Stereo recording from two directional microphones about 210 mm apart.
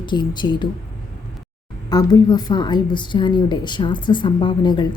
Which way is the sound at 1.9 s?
20° left (ahead or behind).